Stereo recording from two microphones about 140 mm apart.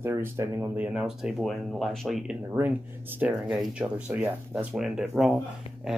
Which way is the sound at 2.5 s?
15° right (ahead or behind).